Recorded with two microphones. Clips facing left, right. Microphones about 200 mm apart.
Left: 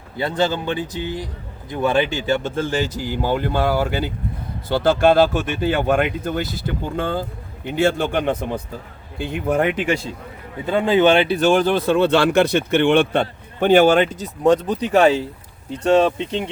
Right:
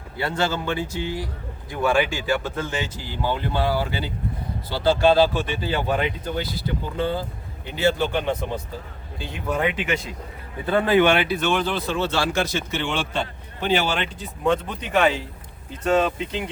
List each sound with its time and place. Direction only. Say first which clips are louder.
0.2 s a man's voice: left 4 dB; 20° left (ahead or behind)
10.7 s speech: left 3 dB; 15° left (ahead or behind)
11.4 s a man's voice: left 7 dB; 50° left (ahead or behind); by 16.5 s 30° left (ahead or behind)